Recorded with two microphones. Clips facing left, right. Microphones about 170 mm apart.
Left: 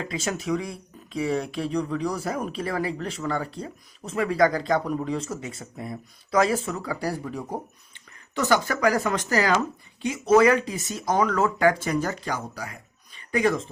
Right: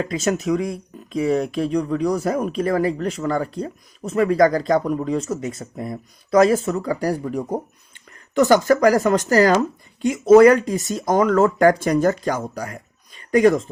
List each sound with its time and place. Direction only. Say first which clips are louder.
0.1 s speech: right 6 dB; 45° right (ahead or behind)